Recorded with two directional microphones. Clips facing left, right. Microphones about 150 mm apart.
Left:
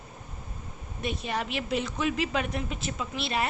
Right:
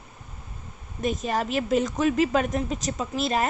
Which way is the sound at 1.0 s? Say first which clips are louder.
Right 6 dB; 40° right (ahead or behind).